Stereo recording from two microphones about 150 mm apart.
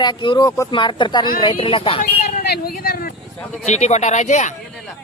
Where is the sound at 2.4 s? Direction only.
80° left.